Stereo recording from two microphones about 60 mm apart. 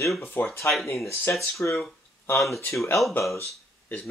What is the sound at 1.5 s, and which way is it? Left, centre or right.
Speech, left.